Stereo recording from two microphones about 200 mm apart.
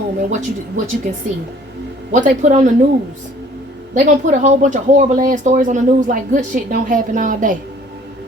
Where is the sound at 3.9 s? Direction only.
40° right (ahead or behind).